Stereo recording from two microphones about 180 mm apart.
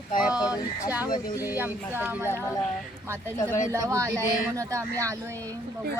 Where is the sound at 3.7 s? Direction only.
15° right (ahead or behind).